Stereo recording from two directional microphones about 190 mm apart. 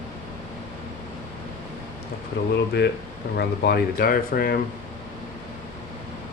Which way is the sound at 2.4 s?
65° left (ahead or behind).